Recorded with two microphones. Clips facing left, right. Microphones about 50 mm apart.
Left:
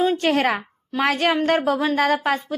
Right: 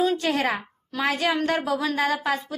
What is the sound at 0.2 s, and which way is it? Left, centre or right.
A woman's voice, left.